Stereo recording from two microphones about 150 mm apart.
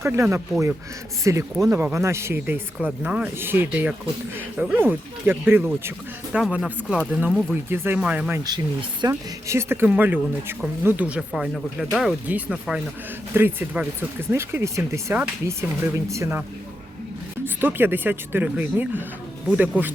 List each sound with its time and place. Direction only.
0.0 s speech: 15° right (ahead or behind)
8.4 s speech: 30° right (ahead or behind)
17.4 s speech: 15° right (ahead or behind)